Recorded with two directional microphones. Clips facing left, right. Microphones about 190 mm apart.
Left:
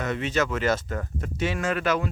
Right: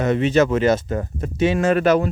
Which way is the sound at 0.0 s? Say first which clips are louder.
Right 9 dB; 25° right (ahead or behind).